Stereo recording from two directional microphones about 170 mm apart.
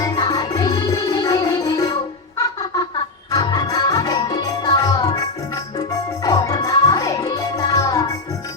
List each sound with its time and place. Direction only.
0.0 s music: 20° left (ahead or behind)
2.4 s a sound: 20° left (ahead or behind)
3.3 s music: 20° left (ahead or behind)
6.2 s music: 20° left (ahead or behind)